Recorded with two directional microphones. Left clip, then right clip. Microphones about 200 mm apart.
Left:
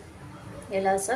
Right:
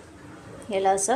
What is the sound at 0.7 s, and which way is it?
Speech, 35° right (ahead or behind).